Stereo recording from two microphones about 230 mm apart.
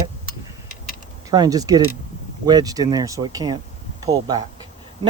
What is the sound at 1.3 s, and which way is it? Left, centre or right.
Speech, centre.